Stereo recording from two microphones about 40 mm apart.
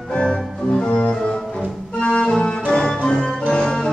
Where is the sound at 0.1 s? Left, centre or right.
Left.